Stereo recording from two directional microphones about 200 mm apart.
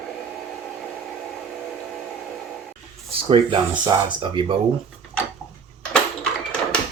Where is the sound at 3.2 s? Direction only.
25° right (ahead or behind).